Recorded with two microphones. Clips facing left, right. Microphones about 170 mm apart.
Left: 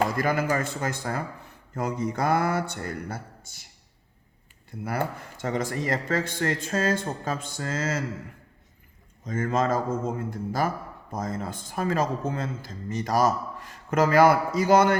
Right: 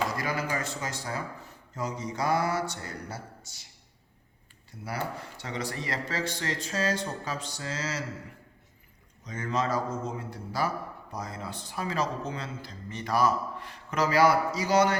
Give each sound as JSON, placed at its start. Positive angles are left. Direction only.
{"t": 0.0, "sound": "a man's voice", "side_deg": 50}
{"t": 4.7, "sound": "a man's voice", "side_deg": 55}
{"t": 9.2, "sound": "a man's voice", "side_deg": 50}